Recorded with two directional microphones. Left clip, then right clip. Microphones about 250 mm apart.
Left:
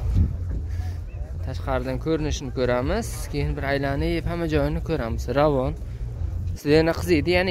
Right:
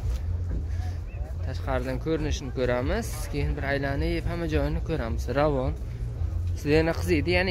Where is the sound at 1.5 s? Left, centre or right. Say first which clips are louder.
Left 3 dB; centre.